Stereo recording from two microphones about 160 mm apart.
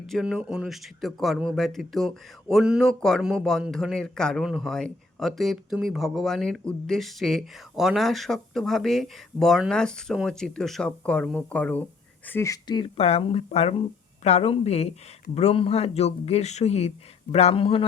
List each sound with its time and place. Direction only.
0.0 s a man's voice: 5° right (ahead or behind); by 17.8 s 35° left (ahead or behind)